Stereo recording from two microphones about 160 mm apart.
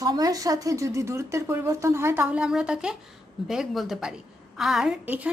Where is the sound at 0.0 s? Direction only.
25° right (ahead or behind).